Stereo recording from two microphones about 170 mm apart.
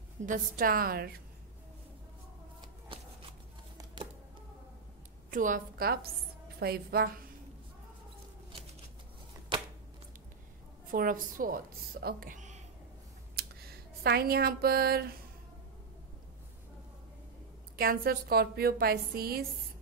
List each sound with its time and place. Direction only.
0.2 s a woman's voice: 50° right (ahead or behind)
2.9 s a sound: 30° right (ahead or behind)
5.3 s a woman's voice: 50° right (ahead or behind)
10.9 s a woman's voice: 55° right (ahead or behind)
13.4 s speech: 65° right (ahead or behind)
17.7 s a woman's voice: 60° right (ahead or behind)